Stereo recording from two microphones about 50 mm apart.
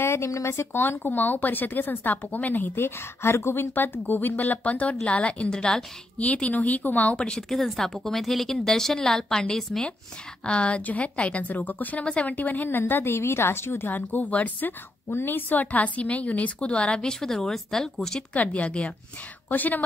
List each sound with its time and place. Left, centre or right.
0.0 s speech: left
0.8 s speech: left
3.7 s a woman's voice: left
7.2 s a woman's voice: centre
7.5 s a woman's voice: centre; by 12.4 s left
12.4 s a woman's voice: left
15.0 s a woman's voice: left; by 18.2 s centre
18.3 s a woman's voice: left
19.5 s speech: left